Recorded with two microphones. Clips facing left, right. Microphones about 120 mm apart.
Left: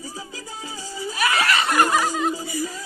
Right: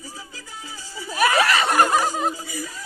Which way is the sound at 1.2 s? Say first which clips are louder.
Right 3 dB; 40° right (ahead or behind).